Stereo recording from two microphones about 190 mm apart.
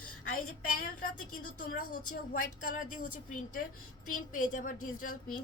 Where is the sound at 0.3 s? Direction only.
45° left (ahead or behind).